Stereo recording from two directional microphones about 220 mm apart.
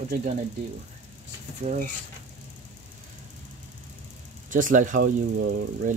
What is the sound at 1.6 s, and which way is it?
Speech, 35° right (ahead or behind).